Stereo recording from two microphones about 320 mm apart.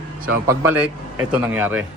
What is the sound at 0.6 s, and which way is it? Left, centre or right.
Speech, centre.